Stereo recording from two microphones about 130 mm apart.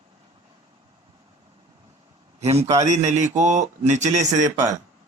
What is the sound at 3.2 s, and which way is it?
Speech, 65° right (ahead or behind).